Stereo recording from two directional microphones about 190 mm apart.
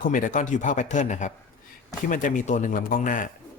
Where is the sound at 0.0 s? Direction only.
45° left (ahead or behind).